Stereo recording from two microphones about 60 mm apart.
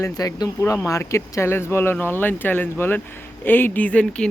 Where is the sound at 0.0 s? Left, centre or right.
Left.